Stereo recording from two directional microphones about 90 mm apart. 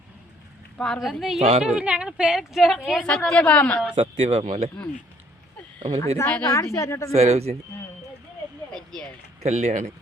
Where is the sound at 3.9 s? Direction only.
90° right.